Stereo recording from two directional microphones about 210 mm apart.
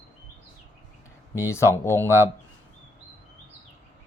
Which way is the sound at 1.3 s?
15° left (ahead or behind).